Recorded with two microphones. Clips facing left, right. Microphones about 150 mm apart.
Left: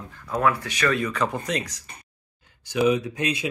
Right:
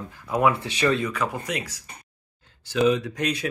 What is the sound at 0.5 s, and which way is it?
Speech, 25° right (ahead or behind).